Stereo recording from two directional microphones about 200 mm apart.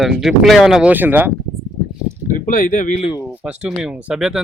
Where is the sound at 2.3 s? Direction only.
45° left (ahead or behind).